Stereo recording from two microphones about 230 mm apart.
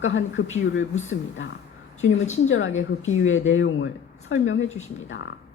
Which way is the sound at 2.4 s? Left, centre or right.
Left.